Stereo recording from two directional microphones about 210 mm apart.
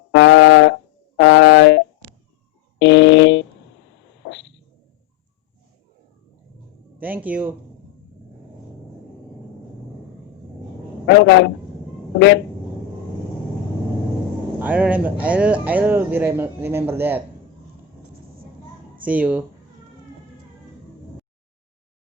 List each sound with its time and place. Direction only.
0.1 s brass instrument: 60° left (ahead or behind)
2.7 s a sound: 60° left (ahead or behind)
7.0 s speech: 10° right (ahead or behind)
11.0 s a man's voice: 55° left (ahead or behind)
14.6 s speech: 5° right (ahead or behind)
19.0 s speech: 5° right (ahead or behind)